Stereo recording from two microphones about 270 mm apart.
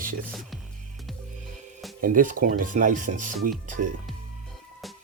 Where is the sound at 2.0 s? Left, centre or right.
Right.